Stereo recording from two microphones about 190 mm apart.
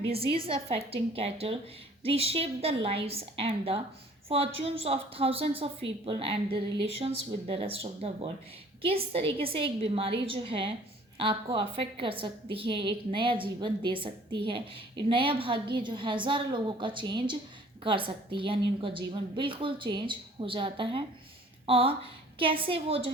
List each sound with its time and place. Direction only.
0.1 s a woman's voice: 30° right (ahead or behind)